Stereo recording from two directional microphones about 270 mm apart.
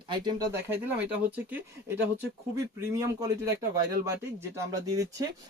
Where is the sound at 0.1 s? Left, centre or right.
Centre.